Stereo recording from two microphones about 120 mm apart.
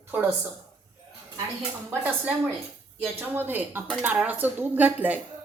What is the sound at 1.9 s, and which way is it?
Speech, 15° right (ahead or behind).